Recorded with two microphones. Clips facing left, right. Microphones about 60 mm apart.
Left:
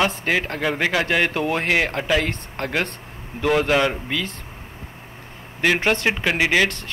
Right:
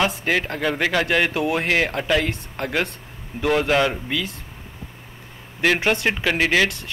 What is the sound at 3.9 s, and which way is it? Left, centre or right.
Speech, centre.